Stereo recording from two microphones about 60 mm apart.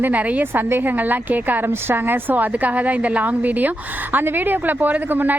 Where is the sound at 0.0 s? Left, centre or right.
Right.